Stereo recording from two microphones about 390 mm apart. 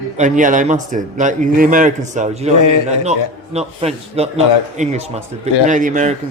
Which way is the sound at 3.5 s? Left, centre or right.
Centre.